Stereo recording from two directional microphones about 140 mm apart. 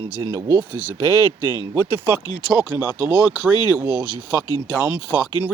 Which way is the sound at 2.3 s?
30° left (ahead or behind).